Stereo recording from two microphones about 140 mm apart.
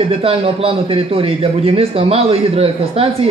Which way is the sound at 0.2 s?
45° right (ahead or behind).